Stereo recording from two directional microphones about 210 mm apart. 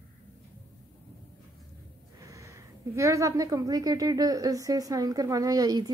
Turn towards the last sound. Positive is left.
turn(degrees=-15)  # may be behind; listen again after turning